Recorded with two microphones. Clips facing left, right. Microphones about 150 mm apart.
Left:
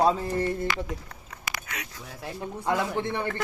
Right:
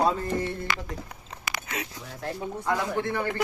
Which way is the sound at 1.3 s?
25° right (ahead or behind).